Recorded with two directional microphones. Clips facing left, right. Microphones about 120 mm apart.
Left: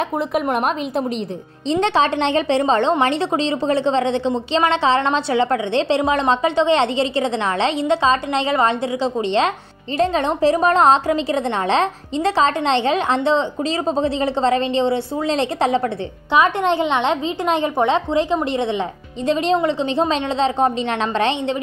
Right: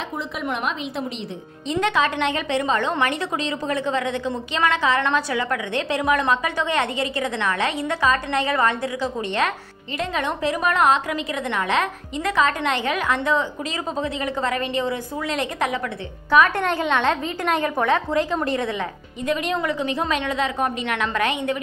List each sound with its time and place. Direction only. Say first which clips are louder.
0.3 s a woman's voice: left 5 dB; 45° left (ahead or behind)
1.7 s a woman's voice: left 4 dB; 30° left (ahead or behind)